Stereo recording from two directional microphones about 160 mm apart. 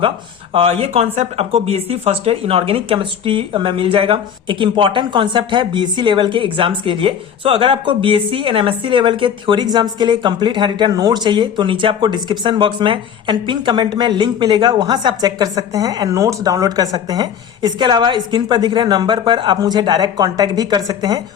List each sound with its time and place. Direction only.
0.5 s a woman's voice: 40° right (ahead or behind)